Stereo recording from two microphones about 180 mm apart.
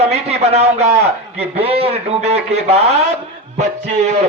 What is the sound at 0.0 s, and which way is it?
A man's voice, 35° right (ahead or behind).